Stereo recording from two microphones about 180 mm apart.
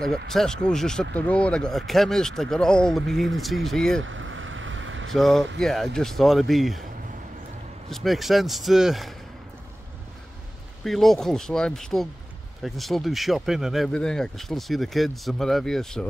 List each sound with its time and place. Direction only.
0.3 s speech: 5° left (ahead or behind)
4.0 s vehicle: 90° right
5.1 s speech: centre (ahead or behind)
7.9 s speech: centre (ahead or behind)
10.8 s speech: centre (ahead or behind)